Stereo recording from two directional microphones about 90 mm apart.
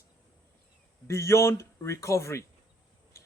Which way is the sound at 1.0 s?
35° left (ahead or behind).